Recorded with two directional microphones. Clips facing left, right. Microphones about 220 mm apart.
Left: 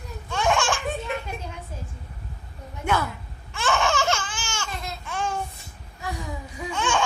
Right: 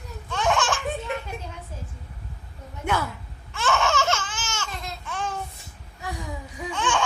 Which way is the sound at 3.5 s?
15° left (ahead or behind).